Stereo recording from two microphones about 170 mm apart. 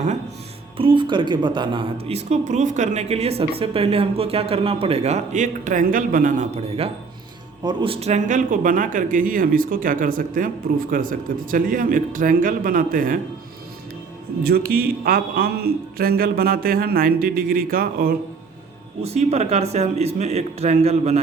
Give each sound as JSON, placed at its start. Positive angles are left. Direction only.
{"t": 0.8, "sound": "a man's voice", "side_deg": -30}
{"t": 14.4, "sound": "speech", "side_deg": -60}
{"t": 19.0, "sound": "a man's voice", "side_deg": -40}